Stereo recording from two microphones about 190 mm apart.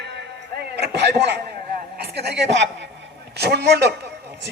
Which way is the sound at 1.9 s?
60° right (ahead or behind).